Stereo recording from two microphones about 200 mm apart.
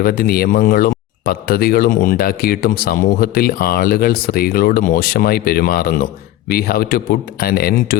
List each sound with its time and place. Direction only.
0.0 s speech: 45° left (ahead or behind)